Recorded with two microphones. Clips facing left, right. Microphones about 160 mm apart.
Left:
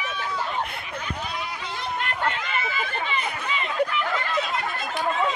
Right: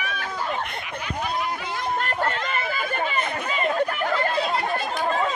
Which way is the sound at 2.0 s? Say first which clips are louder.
Right 2 dB; 40° right (ahead or behind).